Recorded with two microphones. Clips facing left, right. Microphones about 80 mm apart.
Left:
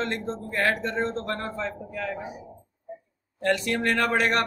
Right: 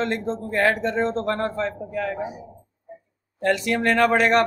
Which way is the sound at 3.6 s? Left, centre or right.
Right.